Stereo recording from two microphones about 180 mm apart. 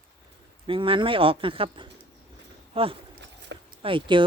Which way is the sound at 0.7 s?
30° right (ahead or behind).